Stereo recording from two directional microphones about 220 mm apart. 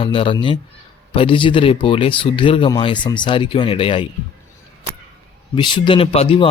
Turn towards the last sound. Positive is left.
turn(degrees=25)  # may be behind; listen again after turning